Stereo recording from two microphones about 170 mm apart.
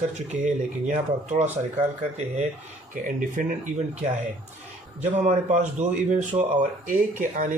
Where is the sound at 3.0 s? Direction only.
50° right (ahead or behind).